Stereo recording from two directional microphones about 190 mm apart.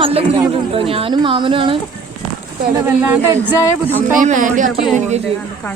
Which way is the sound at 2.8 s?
10° right (ahead or behind).